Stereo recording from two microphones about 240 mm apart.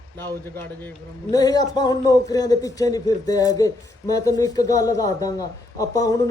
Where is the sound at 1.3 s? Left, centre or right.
Centre.